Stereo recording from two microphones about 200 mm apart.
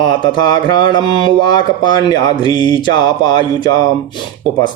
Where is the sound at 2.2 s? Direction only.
20° left (ahead or behind).